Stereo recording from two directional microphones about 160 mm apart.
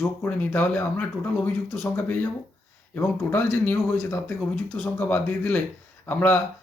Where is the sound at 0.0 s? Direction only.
10° left (ahead or behind).